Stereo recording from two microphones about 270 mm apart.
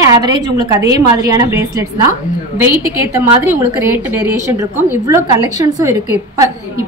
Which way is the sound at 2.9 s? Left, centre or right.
Centre.